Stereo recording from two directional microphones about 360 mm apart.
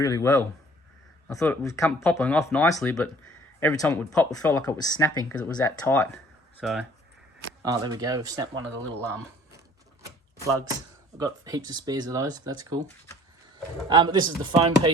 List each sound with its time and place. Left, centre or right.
0.1 s speech: centre
11.2 s speech: centre
13.9 s speech: centre